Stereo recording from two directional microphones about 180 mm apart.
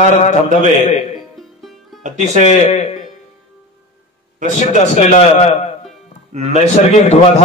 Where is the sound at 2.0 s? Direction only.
45° right (ahead or behind).